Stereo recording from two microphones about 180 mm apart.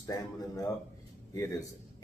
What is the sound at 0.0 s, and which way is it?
Speech, 20° left (ahead or behind).